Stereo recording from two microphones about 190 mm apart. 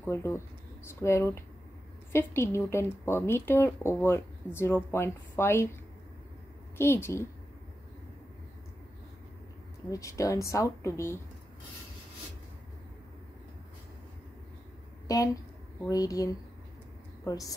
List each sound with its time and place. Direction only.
0.1 s a woman's voice: 15° left (ahead or behind)
6.8 s a woman's voice: 10° left (ahead or behind)
9.8 s a woman's voice: 15° left (ahead or behind)
15.1 s a woman's voice: 20° left (ahead or behind)